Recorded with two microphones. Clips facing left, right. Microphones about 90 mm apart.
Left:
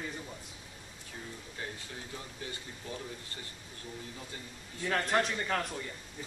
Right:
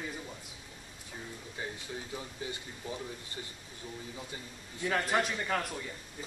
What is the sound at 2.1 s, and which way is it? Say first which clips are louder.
Speech: right 1 dB; 15° right (ahead or behind).